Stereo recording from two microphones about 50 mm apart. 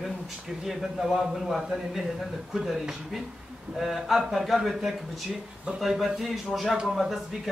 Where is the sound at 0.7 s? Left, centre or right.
Centre.